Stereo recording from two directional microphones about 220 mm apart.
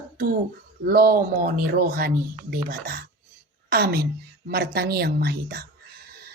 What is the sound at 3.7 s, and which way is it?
Speech, 45° right (ahead or behind).